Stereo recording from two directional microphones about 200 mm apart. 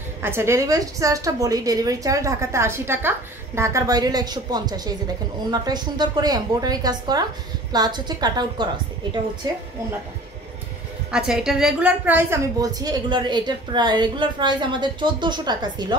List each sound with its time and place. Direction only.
0.2 s a woman's voice: 10° right (ahead or behind)
11.1 s a woman's voice: 5° right (ahead or behind); by 16.0 s 20° right (ahead or behind)